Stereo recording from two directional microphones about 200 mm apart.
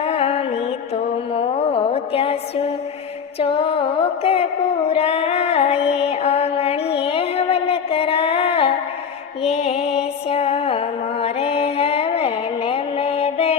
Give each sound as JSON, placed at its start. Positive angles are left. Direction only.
{"t": 0.0, "sound": "music", "side_deg": 30}